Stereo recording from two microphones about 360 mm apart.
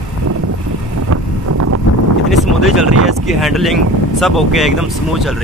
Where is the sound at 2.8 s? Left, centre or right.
Right.